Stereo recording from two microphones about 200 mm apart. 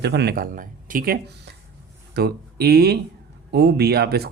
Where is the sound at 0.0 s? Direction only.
55° right (ahead or behind).